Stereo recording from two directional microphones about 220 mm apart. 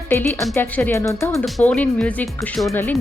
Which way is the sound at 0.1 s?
10° left (ahead or behind).